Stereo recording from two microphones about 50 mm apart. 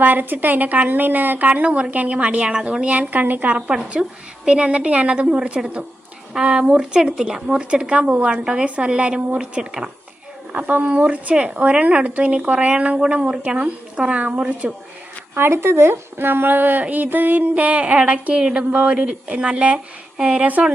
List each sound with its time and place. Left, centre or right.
0.0 s a woman's voice: right
3.7 s a woman's voice: centre
10.5 s speech: right
15.4 s speech: right